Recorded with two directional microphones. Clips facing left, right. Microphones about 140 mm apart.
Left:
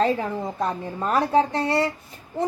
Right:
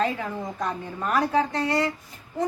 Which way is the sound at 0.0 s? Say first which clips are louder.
Left 4 dB; 30° left (ahead or behind).